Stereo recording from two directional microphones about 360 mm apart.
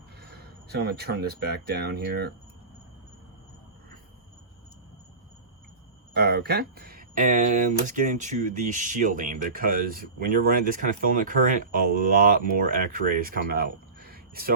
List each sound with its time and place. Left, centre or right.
0.2 s speech: right
6.1 s speech: right